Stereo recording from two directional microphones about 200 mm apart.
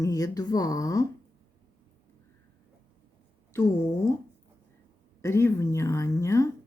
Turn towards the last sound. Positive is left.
turn(degrees=15)  # may be behind; listen again after turning